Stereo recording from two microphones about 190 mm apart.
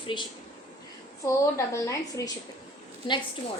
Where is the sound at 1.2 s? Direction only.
15° left (ahead or behind).